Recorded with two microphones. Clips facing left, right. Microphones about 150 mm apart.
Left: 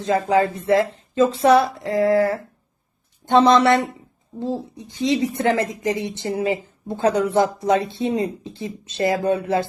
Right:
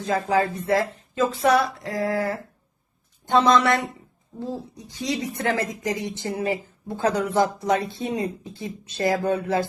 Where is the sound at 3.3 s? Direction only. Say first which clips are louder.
Left 4 dB; 25° left (ahead or behind).